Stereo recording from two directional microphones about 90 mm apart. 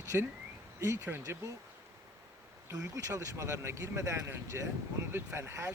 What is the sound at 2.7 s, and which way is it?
Speech, 40° right (ahead or behind).